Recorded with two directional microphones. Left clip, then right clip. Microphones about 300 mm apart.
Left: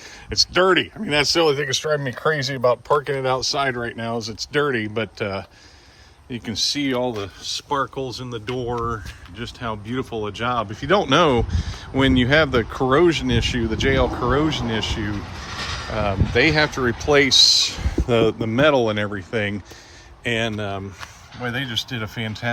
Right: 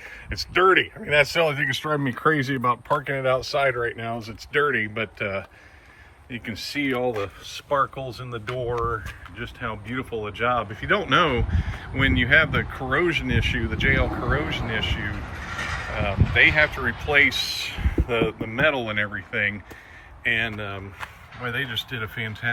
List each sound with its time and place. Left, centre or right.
0.3 s speech: centre
2.2 s speech: left
2.8 s speech: centre
16.3 s speech: centre